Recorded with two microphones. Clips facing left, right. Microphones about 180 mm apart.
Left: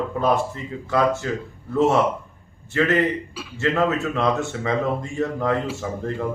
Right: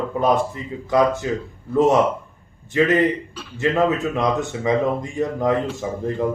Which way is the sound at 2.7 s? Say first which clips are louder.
Right 3 dB; 15° right (ahead or behind).